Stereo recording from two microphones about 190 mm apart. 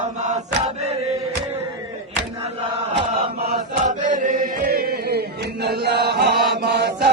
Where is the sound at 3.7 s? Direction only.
40° right (ahead or behind); by 7.1 s 60° right (ahead or behind).